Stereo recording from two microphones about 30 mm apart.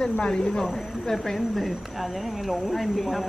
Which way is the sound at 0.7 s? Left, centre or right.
Centre.